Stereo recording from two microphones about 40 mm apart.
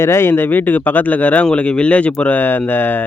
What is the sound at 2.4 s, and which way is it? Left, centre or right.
Speech, left.